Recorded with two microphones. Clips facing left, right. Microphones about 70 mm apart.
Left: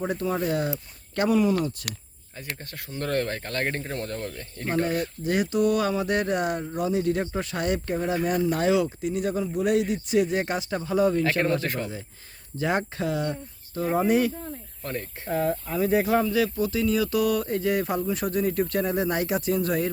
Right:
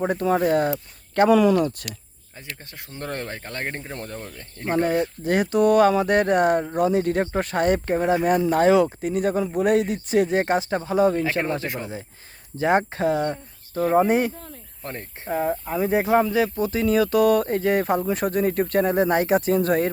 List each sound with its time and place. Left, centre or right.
0.0 s speech: right
1.3 s speech: right
3.0 s speech: centre
4.7 s speech: right
12.5 s speech: right
16.8 s speech: right